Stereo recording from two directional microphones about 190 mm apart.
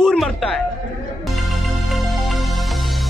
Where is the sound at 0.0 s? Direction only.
5° left (ahead or behind).